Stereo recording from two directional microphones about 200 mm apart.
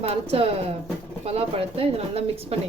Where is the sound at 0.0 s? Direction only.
30° right (ahead or behind).